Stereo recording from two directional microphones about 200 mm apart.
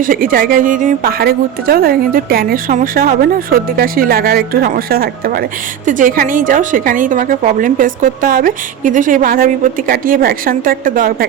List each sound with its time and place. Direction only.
0.0 s a woman's voice: 45° right (ahead or behind)